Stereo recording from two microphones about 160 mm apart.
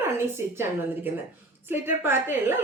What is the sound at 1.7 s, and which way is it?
Speech, 15° right (ahead or behind).